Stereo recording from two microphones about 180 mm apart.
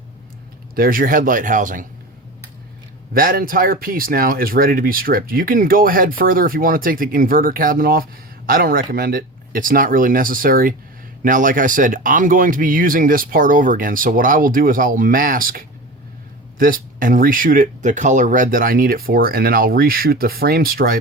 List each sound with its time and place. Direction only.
0.8 s speech: 50° right (ahead or behind)
3.1 s speech: 55° right (ahead or behind)